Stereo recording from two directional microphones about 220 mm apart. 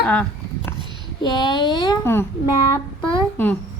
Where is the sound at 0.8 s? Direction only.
20° right (ahead or behind).